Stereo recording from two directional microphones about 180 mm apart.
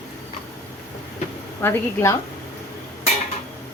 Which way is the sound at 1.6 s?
15° left (ahead or behind).